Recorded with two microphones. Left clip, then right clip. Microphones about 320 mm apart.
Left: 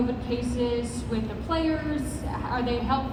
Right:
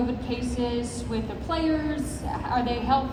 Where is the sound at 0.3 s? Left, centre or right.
Right.